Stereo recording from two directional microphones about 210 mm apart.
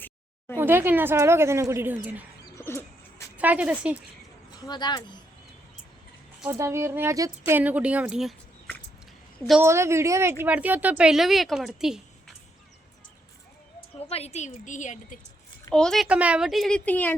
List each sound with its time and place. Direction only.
0.5 s a woman's voice: 10° right (ahead or behind)
2.4 s dog: 10° left (ahead or behind)
3.3 s a woman's voice: 5° right (ahead or behind)
4.5 s speech: 20° left (ahead or behind)
6.4 s a woman's voice: 10° right (ahead or behind); by 8.8 s 5° left (ahead or behind)
9.5 s a woman's voice: 10° right (ahead or behind)
14.1 s a woman's voice: 30° left (ahead or behind)
15.7 s speech: 5° left (ahead or behind)